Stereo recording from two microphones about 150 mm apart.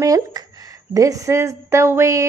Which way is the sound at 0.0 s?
20° right (ahead or behind).